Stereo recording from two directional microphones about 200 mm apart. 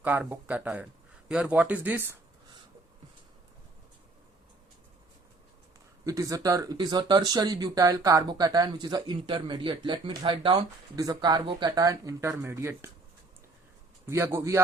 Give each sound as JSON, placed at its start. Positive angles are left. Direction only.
{"t": 0.0, "sound": "speech", "side_deg": -10}
{"t": 6.1, "sound": "speech", "side_deg": -15}
{"t": 14.3, "sound": "speech", "side_deg": -15}